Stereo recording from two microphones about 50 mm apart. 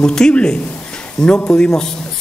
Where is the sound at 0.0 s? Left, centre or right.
Centre.